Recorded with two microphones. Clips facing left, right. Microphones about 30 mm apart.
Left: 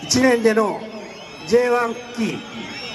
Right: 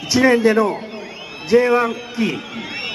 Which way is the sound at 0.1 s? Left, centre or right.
Centre.